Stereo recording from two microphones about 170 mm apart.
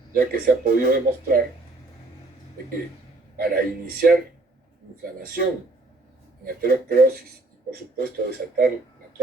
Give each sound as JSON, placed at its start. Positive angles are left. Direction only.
{"t": 0.1, "sound": "a man's voice", "side_deg": -60}
{"t": 3.3, "sound": "a man's voice", "side_deg": -60}